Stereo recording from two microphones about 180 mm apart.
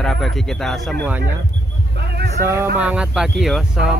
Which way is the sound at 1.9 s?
65° right (ahead or behind).